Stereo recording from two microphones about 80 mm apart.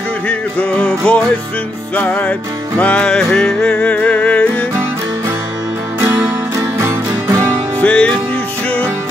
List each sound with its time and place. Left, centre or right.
0.3 s music: centre
6.5 s music: right
7.8 s music: centre